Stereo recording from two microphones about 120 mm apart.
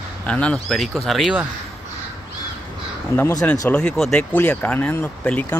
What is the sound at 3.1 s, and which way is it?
Speech, 20° left (ahead or behind).